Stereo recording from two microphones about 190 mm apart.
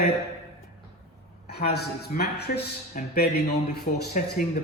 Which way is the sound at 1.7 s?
60° left (ahead or behind).